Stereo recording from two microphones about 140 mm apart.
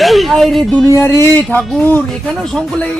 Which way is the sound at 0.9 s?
20° left (ahead or behind).